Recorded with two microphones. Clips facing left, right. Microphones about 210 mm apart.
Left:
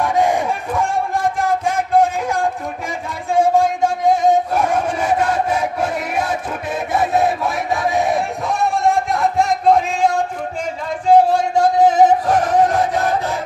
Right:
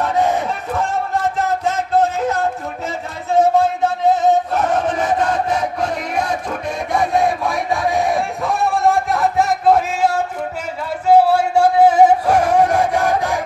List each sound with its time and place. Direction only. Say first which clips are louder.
0.0 s battle cry: left 1 dB; 10° left (ahead or behind)
2.0 s a sound: left 1 dB; 10° left (ahead or behind); by 10.1 s 5° right (ahead or behind)
11.1 s music: even; 10° right (ahead or behind)